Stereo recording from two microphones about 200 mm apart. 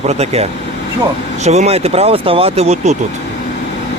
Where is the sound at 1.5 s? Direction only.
30° right (ahead or behind).